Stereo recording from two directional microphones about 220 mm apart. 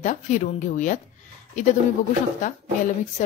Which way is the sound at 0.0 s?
35° left (ahead or behind).